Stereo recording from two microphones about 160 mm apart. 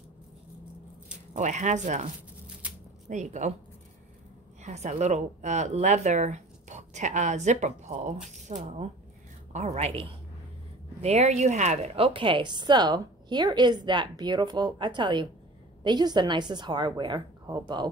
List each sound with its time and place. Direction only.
1.3 s speech: 45° right (ahead or behind)
3.1 s speech: 50° right (ahead or behind)
4.6 s a woman's voice: 45° right (ahead or behind); by 17.8 s 25° right (ahead or behind)